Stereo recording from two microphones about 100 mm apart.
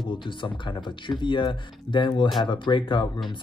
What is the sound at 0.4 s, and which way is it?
Speech, 50° left (ahead or behind).